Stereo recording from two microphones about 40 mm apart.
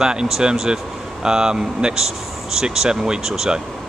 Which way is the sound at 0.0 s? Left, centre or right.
Centre.